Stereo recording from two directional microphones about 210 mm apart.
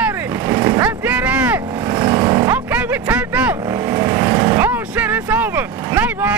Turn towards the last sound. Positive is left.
turn(degrees=-5)  # may be behind; listen again after turning